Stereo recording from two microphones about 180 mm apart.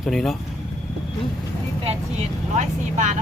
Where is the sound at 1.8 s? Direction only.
40° right (ahead or behind).